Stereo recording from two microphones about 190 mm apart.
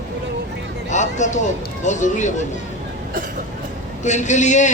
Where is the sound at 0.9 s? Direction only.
40° left (ahead or behind).